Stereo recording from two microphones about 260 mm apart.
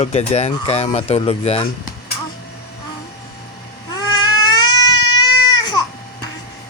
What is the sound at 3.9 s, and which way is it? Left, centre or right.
Baby cry, centre.